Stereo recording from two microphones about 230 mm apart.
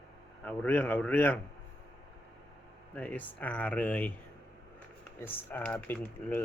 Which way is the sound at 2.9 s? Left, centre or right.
Centre.